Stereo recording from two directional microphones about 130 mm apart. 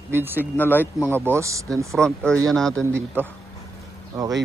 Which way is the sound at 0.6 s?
15° left (ahead or behind).